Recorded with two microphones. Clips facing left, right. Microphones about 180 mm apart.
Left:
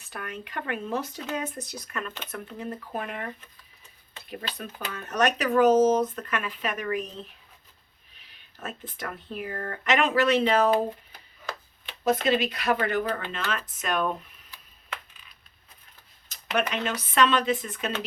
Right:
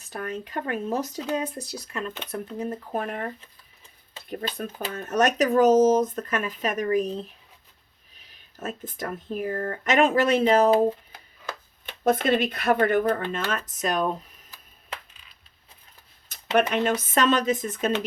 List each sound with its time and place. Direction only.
0.0 s speech: 40° right (ahead or behind)
2.3 s speech: 40° right (ahead or behind)
4.3 s speech: 45° right (ahead or behind)
8.1 s speech: 40° right (ahead or behind)
11.9 s speech: 55° right (ahead or behind)
16.6 s speech: 50° right (ahead or behind)